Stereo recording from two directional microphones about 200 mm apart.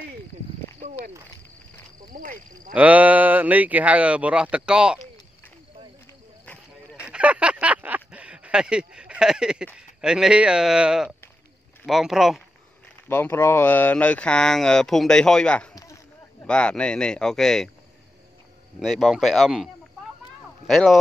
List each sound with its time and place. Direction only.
0.7 s speech: 35° right (ahead or behind)
2.1 s speech: 45° right (ahead or behind)
2.7 s speech: 5° right (ahead or behind)
6.4 s a sound: 5° left (ahead or behind)
7.1 s a sound: 5° right (ahead or behind)
9.8 s speech: 5° right (ahead or behind)
13.1 s speech: 10° left (ahead or behind)
18.8 s speech: centre (ahead or behind)